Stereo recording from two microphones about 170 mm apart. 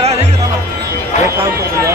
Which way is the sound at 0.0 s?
35° right (ahead or behind).